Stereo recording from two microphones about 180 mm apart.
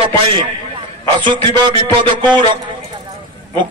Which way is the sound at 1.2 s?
25° right (ahead or behind).